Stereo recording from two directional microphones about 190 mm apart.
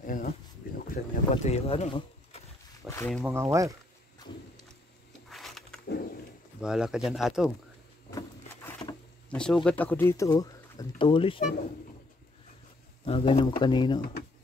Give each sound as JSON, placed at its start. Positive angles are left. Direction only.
{"t": 0.0, "sound": "speech", "side_deg": 45}
{"t": 0.7, "sound": "boat", "side_deg": 50}
{"t": 1.3, "sound": "speech", "side_deg": 30}
{"t": 2.9, "sound": "speech", "side_deg": 10}
{"t": 3.3, "sound": "speech", "side_deg": -15}
{"t": 5.3, "sound": "a sound", "side_deg": 0}
{"t": 5.9, "sound": "a sound", "side_deg": 50}
{"t": 6.6, "sound": "speech", "side_deg": -5}
{"t": 8.6, "sound": "speech", "side_deg": 10}
{"t": 13.0, "sound": "speech", "side_deg": 30}